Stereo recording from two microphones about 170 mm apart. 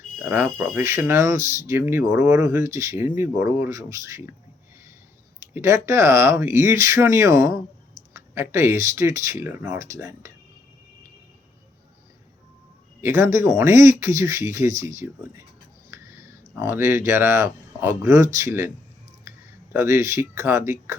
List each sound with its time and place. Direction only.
0.2 s speech: 10° right (ahead or behind)
5.5 s speech: 15° right (ahead or behind)
13.0 s speech: 15° right (ahead or behind)
19.7 s speech: 15° right (ahead or behind)